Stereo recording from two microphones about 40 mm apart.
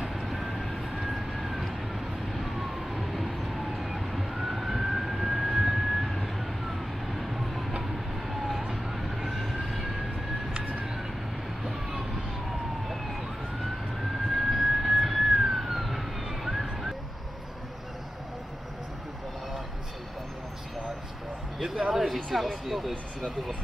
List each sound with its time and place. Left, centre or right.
0.0 s vehicle: centre
3.3 s emergency vehicle: centre
7.8 s vehicle: centre
8.6 s emergency vehicle: centre
10.5 s a sound: right
11.6 s emergency vehicle: centre
14.3 s vehicle: centre
21.9 s a sound: centre
22.5 s speech: centre